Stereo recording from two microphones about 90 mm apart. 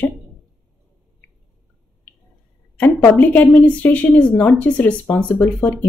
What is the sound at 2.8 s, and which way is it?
A woman's voice, 20° left (ahead or behind).